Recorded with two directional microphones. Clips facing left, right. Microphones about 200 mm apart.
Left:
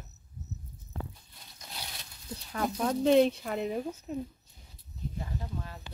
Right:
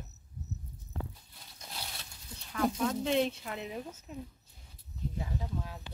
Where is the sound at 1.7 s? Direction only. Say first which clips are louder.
Even; centre (ahead or behind).